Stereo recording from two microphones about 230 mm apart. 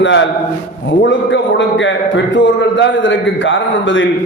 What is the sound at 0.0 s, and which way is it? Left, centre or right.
Speech, left.